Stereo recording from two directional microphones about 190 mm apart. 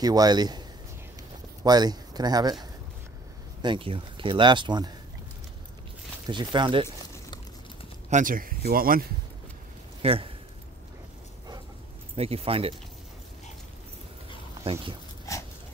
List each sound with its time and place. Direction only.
0.0 s speech: 20° right (ahead or behind)
3.6 s speech: 25° right (ahead or behind)
6.2 s speech: 25° right (ahead or behind)
8.1 s speech: 45° right (ahead or behind)
10.0 s speech: 30° right (ahead or behind)
12.2 s speech: 30° right (ahead or behind)
14.6 s speech: 30° right (ahead or behind)
15.3 s dog: 15° left (ahead or behind)